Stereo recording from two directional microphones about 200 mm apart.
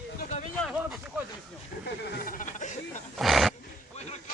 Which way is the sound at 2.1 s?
50° left (ahead or behind).